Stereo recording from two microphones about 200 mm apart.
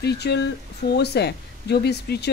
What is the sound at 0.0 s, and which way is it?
A woman's voice, 55° left (ahead or behind).